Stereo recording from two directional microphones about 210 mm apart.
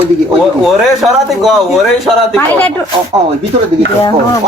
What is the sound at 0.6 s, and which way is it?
A man's voice, centre (ahead or behind).